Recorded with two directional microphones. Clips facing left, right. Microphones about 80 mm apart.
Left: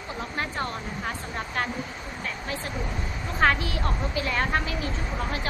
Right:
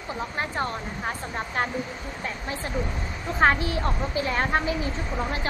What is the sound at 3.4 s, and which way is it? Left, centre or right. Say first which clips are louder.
A woman's voice: right 2 dB; right.